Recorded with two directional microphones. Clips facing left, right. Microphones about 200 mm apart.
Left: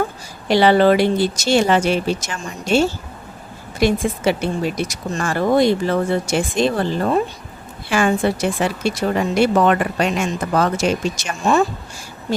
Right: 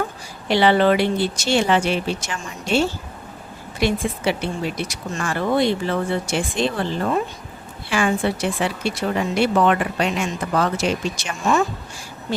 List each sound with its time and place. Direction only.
0.4 s speech: 40° left (ahead or behind)